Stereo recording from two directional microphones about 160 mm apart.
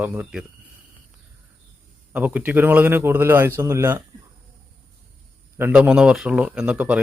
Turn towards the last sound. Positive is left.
turn(degrees=-10)  # may be behind; listen again after turning